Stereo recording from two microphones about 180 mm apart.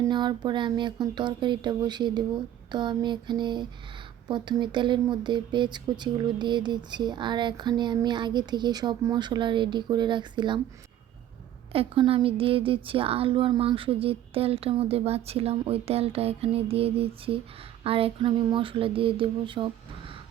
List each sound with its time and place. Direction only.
0.1 s speech: 25° right (ahead or behind)
11.7 s speech: 30° right (ahead or behind)